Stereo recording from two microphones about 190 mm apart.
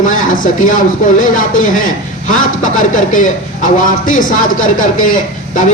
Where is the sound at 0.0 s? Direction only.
40° left (ahead or behind).